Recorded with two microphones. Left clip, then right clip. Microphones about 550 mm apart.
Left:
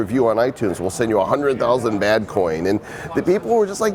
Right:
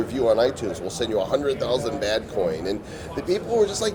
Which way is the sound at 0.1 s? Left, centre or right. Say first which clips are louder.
Left 2 dB; left.